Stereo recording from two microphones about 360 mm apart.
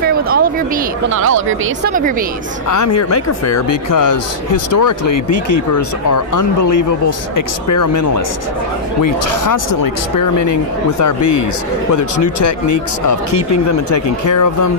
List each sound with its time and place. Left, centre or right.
0.0 s a sound: right
1.1 s speech: right
2.7 s a man's voice: left
10.9 s a man's voice: left
11.1 s speech: left
11.9 s a man's voice: left